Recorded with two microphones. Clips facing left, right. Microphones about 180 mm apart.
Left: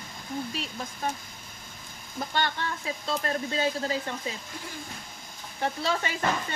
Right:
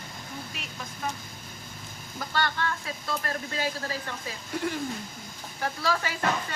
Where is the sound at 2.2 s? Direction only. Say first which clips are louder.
Even; 20° left (ahead or behind).